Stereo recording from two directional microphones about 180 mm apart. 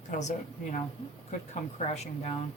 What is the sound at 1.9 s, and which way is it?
Speech, 35° left (ahead or behind).